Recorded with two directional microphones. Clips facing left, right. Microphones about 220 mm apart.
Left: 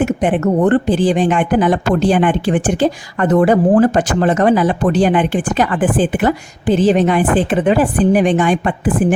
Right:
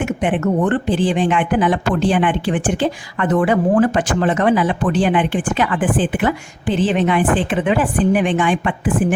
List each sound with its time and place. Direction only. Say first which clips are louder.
0.0 s speech: left 4 dB; 40° left (ahead or behind)